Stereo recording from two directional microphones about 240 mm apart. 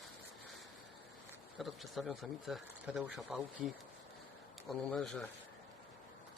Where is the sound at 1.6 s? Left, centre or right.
Centre.